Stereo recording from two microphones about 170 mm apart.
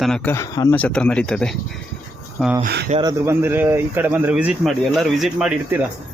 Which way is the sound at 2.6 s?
65° right (ahead or behind).